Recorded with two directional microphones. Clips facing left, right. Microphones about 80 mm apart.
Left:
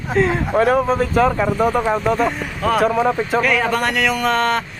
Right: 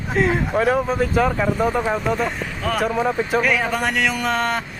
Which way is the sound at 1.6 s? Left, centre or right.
Centre.